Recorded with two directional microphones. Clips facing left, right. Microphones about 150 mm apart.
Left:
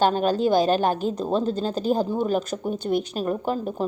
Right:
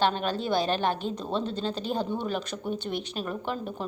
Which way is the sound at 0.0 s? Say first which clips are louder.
Left 7 dB; 40° left (ahead or behind).